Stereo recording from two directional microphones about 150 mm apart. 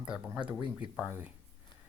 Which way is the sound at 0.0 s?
5° right (ahead or behind).